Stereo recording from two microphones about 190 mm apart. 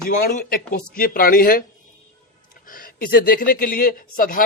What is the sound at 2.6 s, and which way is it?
Speech, 45° left (ahead or behind).